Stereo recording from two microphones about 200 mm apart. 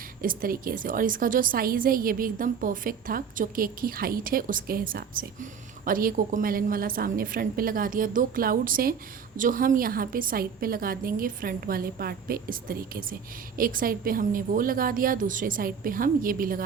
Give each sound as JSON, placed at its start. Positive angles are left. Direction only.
{"t": 0.2, "sound": "a woman's voice", "side_deg": -45}